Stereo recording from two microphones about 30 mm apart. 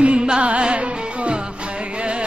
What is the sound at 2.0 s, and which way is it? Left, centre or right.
Carnatic music, right.